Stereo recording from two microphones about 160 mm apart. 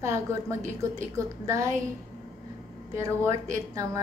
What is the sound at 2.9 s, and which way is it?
Speech, 20° right (ahead or behind).